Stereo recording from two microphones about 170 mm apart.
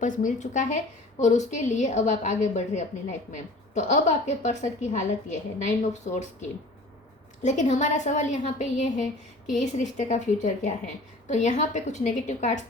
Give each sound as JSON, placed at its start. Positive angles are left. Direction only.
{"t": 0.0, "sound": "a woman's voice", "side_deg": 50}
{"t": 7.4, "sound": "a woman's voice", "side_deg": 45}